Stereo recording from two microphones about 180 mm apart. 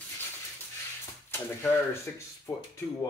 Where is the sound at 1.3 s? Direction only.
15° left (ahead or behind).